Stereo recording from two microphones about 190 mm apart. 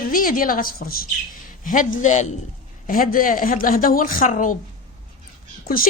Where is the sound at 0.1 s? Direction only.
45° left (ahead or behind).